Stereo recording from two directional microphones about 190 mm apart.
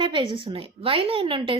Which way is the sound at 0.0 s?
25° right (ahead or behind).